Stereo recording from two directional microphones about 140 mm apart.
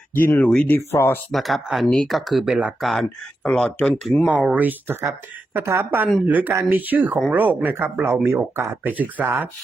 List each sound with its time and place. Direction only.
0.1 s speech: 15° left (ahead or behind)
1.3 s speech: centre (ahead or behind)
3.4 s speech: 10° left (ahead or behind)
4.3 s speech: 10° right (ahead or behind)